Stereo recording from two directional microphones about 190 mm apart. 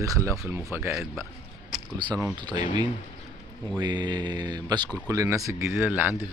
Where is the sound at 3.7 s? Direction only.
25° right (ahead or behind).